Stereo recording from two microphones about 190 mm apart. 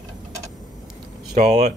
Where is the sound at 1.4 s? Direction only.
35° right (ahead or behind).